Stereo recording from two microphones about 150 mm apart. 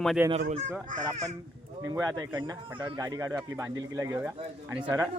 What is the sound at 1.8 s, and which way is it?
Speech, 20° right (ahead or behind).